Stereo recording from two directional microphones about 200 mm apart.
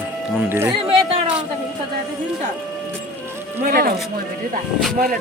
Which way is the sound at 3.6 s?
50° right (ahead or behind).